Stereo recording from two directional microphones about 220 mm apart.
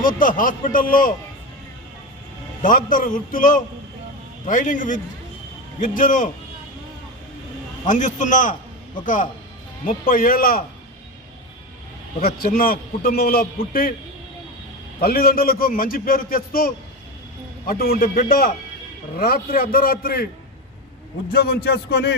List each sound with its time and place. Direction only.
0.2 s a man's voice: 35° left (ahead or behind)
2.6 s a man's voice: 35° left (ahead or behind)
7.9 s a man's voice: 35° left (ahead or behind)
10.1 s a man's voice: 40° left (ahead or behind)
12.2 s a man's voice: 40° left (ahead or behind)
15.0 s a man's voice: 45° left (ahead or behind)
21.2 s a man's voice: 45° left (ahead or behind)